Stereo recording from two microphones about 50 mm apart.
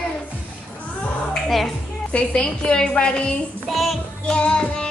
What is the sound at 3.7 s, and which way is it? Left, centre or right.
Music, centre.